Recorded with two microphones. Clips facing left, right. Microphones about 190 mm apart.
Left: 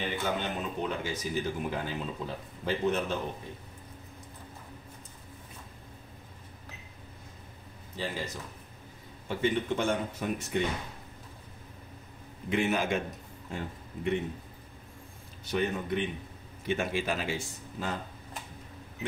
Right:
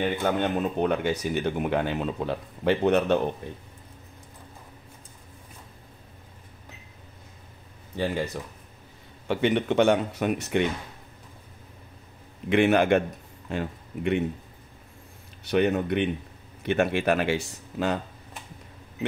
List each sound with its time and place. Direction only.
0.0 s speech: 60° right (ahead or behind)
7.9 s speech: 60° right (ahead or behind)
9.3 s speech: 75° right (ahead or behind)
12.4 s speech: 70° right (ahead or behind)
13.5 s speech: 75° right (ahead or behind)
15.4 s speech: 70° right (ahead or behind)